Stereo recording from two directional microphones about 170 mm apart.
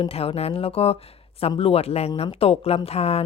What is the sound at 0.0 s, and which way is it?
Speech, 35° left (ahead or behind).